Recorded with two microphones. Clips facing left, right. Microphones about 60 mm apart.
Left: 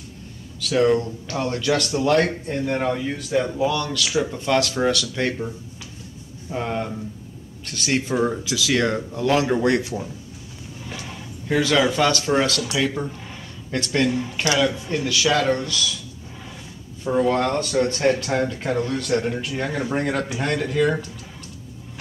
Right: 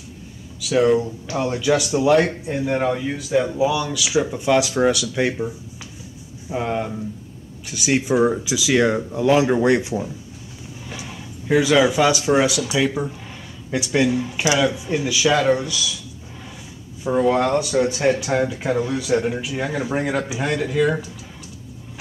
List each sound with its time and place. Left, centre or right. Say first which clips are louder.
0.6 s a man's voice: right 2 dB; centre
6.5 s a man's voice: right 2 dB; centre
17.0 s speech: right 2 dB; centre